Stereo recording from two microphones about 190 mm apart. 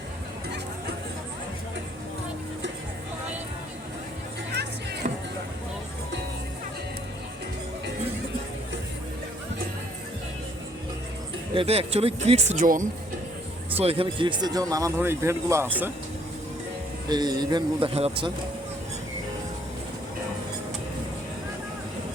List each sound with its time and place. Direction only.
5.0 s vehicle: 40° right (ahead or behind)
11.5 s speech: 30° right (ahead or behind)
13.7 s speech: 30° right (ahead or behind); by 15.7 s 15° right (ahead or behind)
17.1 s speech: 20° right (ahead or behind)